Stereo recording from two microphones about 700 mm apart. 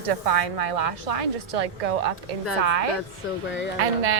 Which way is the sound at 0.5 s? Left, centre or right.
Right.